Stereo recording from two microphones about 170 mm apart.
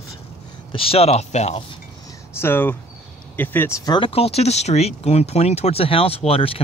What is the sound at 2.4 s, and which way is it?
Speech, 10° left (ahead or behind).